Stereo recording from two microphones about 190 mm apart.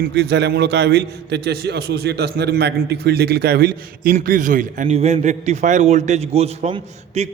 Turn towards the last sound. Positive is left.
turn(degrees=-35)  # may be behind; listen again after turning